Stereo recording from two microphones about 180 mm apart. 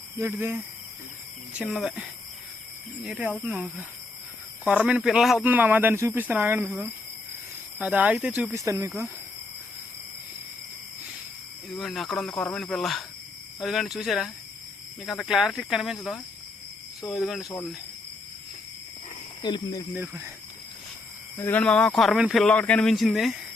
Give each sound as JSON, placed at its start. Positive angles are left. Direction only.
{"t": 0.2, "sound": "speech", "side_deg": -15}
{"t": 8.5, "sound": "speech", "side_deg": -15}
{"t": 11.8, "sound": "speech", "side_deg": 0}
{"t": 19.4, "sound": "speech", "side_deg": 25}
{"t": 19.9, "sound": "speech", "side_deg": -10}
{"t": 21.3, "sound": "speech", "side_deg": 10}